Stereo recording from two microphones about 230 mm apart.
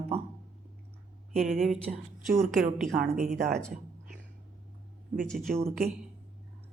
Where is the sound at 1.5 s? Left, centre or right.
Centre.